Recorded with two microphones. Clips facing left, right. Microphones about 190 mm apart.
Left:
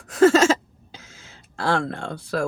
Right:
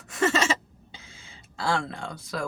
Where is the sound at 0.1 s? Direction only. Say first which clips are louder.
Left 10 dB; 90° left.